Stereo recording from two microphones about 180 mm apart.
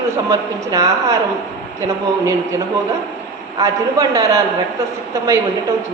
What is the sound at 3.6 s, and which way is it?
Speech, 20° right (ahead or behind).